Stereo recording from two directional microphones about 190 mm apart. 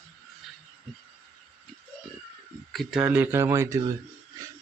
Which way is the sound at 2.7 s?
5° right (ahead or behind).